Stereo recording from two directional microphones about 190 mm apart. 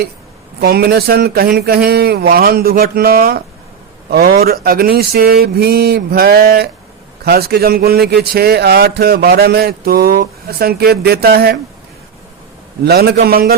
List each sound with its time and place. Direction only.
0.6 s speech: 55° right (ahead or behind)
12.8 s speech: 55° right (ahead or behind)